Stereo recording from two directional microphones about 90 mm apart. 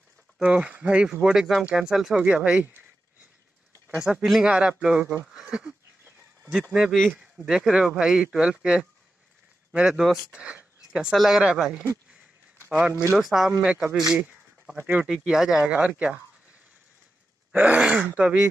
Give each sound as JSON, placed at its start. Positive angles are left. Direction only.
{"t": 0.4, "sound": "speech", "side_deg": -10}
{"t": 4.0, "sound": "speech", "side_deg": -5}
{"t": 13.2, "sound": "speech", "side_deg": -5}
{"t": 17.5, "sound": "speech", "side_deg": -10}